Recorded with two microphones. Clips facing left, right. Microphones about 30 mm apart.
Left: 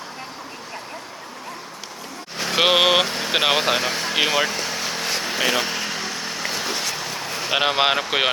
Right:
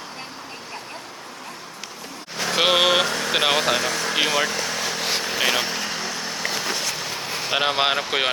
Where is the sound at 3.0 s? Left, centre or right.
Left.